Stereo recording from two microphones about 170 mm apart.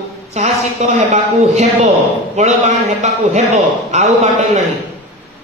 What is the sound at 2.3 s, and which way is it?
A man's voice, 40° right (ahead or behind).